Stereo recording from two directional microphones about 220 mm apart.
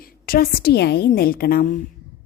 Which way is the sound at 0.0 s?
45° left (ahead or behind).